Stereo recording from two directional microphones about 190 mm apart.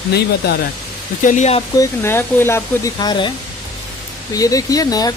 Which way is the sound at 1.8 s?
10° left (ahead or behind).